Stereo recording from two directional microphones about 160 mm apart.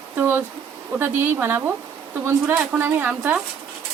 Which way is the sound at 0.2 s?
15° right (ahead or behind).